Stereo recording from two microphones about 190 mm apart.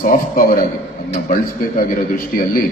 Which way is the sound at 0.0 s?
45° left (ahead or behind).